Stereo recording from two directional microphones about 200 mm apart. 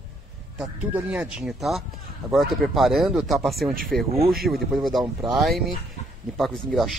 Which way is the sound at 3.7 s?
45° right (ahead or behind).